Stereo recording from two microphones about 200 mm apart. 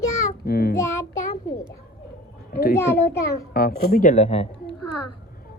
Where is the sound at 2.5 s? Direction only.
50° left (ahead or behind); by 4.6 s 30° left (ahead or behind).